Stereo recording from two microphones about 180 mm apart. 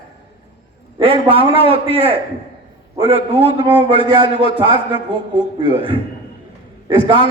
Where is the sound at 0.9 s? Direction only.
30° right (ahead or behind).